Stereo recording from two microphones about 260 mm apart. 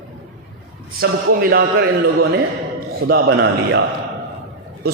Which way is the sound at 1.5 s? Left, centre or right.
Right.